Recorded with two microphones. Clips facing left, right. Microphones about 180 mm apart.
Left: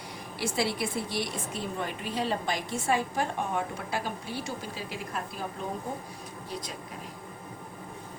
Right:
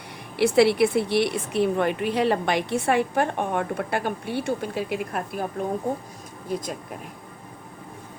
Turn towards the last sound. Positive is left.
turn(degrees=-50)  # may be behind; listen again after turning